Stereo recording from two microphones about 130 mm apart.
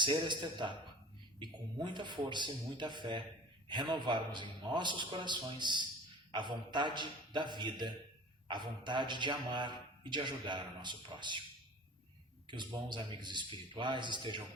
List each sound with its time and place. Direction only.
0.0 s a man's voice: 35° right (ahead or behind)
12.5 s a man's voice: 35° right (ahead or behind)